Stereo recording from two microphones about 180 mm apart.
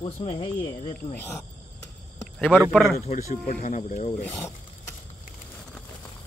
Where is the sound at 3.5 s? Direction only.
40° left (ahead or behind).